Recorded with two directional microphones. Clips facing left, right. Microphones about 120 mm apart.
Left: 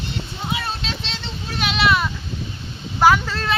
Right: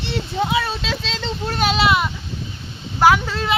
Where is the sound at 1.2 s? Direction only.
90° right.